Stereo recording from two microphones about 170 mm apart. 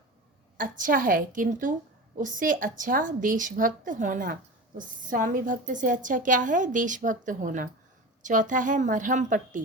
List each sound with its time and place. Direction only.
0.5 s a woman's voice: 50° right (ahead or behind)